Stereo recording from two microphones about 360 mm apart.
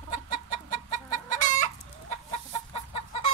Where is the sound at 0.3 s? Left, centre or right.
Centre.